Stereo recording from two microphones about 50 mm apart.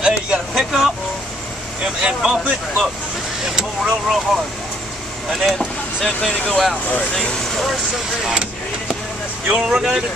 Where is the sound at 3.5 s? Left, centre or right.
Centre.